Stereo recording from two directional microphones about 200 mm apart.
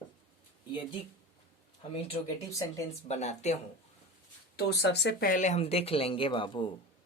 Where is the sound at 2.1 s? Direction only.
30° left (ahead or behind).